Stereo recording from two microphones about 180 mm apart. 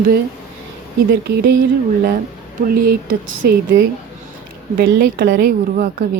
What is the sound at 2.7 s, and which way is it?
Speech, 55° right (ahead or behind).